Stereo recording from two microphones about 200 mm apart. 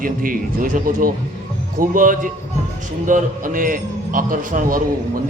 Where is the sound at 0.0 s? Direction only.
45° right (ahead or behind).